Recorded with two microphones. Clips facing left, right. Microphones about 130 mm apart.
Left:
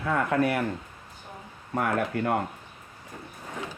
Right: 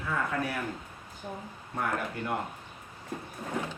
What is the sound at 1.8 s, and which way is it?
Speech, 70° left (ahead or behind).